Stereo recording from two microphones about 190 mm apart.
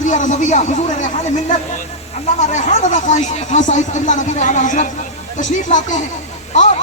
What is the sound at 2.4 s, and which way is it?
Speech, 40° left (ahead or behind).